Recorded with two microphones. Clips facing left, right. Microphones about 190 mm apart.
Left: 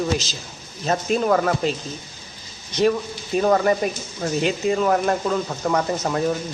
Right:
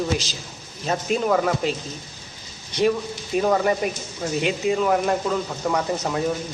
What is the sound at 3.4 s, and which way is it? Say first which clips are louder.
Speech: left 2 dB; 5° right (ahead or behind).